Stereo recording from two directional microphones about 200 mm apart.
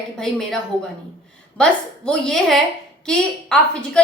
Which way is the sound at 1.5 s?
5° left (ahead or behind).